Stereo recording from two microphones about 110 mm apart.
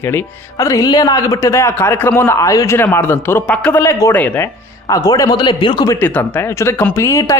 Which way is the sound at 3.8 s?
25° left (ahead or behind).